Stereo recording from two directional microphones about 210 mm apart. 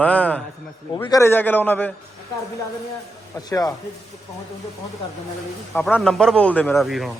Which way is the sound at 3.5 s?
15° left (ahead or behind).